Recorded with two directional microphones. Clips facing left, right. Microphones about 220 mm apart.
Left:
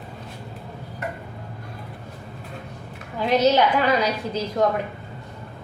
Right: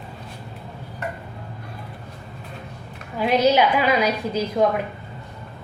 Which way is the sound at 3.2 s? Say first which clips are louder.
Right 1 dB; 10° right (ahead or behind).